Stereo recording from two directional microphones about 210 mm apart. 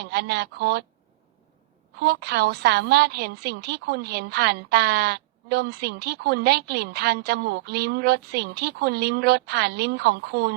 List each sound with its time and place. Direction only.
0.0 s speech: 50° right (ahead or behind)
2.0 s a woman's voice: 50° right (ahead or behind)